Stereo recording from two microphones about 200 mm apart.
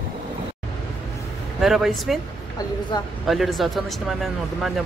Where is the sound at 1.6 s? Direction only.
Centre (ahead or behind).